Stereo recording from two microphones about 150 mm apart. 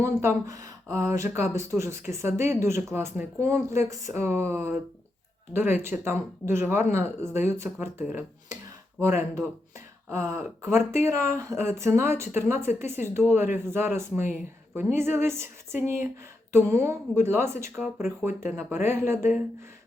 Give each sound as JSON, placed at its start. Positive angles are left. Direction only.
{"t": 0.0, "sound": "speech", "side_deg": -15}
{"t": 5.8, "sound": "speech", "side_deg": -15}
{"t": 9.0, "sound": "speech", "side_deg": -15}